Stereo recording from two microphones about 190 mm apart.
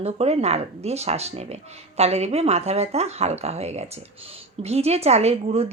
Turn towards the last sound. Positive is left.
turn(degrees=-35)  # may be behind; listen again after turning